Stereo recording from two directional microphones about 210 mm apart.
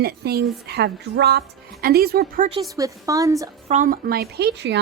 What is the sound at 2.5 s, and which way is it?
A woman's voice, 15° right (ahead or behind).